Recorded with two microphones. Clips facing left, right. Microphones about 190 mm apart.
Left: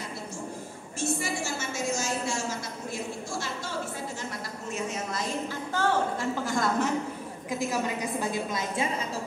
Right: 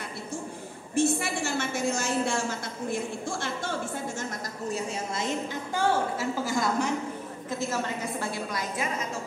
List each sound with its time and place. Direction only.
0.9 s a woman's voice: 60° right (ahead or behind)
4.2 s a sound: 35° right (ahead or behind)
5.8 s a woman's voice: 10° right (ahead or behind)
6.4 s a woman's voice: centre (ahead or behind)
7.4 s a woman's voice: 15° left (ahead or behind)